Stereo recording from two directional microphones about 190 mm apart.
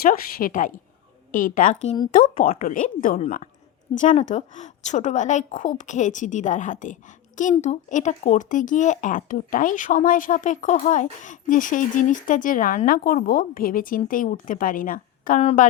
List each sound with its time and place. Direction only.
0.0 s a woman's voice: 50° left (ahead or behind)